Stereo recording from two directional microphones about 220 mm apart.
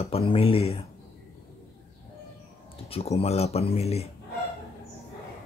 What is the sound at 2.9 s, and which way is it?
Speech, 25° left (ahead or behind).